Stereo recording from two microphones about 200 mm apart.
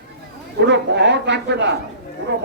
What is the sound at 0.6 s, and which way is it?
A man's voice, 60° right (ahead or behind).